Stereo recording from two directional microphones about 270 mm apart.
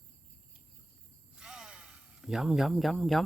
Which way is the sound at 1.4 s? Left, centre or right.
Centre.